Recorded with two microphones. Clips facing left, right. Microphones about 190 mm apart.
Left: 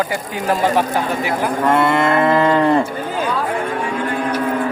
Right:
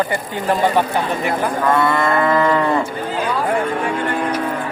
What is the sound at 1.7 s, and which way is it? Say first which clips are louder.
Cattle: left 2 dB; 25° left (ahead or behind).